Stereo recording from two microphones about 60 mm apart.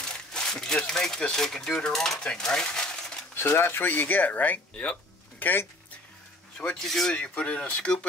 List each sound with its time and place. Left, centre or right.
0.3 s speech: centre
2.2 s a sound: centre
3.3 s speech: left
6.6 s speech: centre
7.2 s speech: left